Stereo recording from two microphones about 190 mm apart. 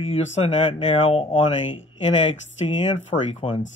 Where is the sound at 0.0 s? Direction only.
30° left (ahead or behind).